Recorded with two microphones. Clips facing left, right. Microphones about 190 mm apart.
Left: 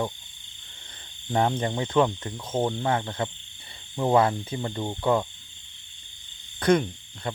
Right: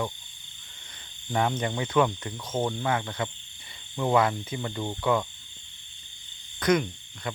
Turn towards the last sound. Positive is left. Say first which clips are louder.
# left 2 dB
turn(degrees=30)  # may be behind; listen again after turning